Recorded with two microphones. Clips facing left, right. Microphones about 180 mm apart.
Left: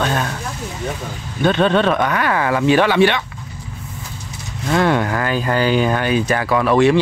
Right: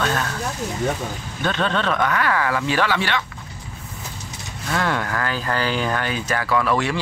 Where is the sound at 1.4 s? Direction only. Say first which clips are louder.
Left 8 dB; 20° left (ahead or behind).